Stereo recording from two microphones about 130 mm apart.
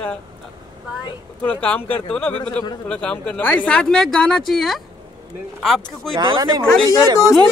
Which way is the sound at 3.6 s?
5° left (ahead or behind).